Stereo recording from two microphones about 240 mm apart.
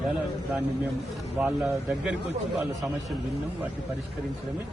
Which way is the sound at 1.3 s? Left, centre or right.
Centre.